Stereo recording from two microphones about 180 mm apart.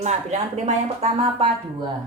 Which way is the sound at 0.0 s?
40° right (ahead or behind).